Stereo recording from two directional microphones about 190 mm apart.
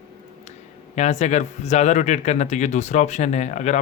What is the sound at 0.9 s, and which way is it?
Speech, 35° left (ahead or behind).